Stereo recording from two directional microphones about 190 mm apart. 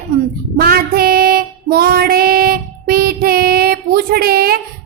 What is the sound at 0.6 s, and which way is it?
Female singing, 50° right (ahead or behind).